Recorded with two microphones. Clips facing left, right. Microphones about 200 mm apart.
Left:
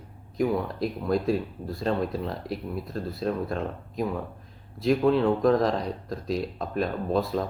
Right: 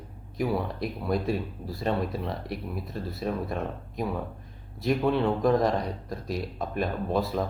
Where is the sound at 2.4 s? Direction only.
25° left (ahead or behind).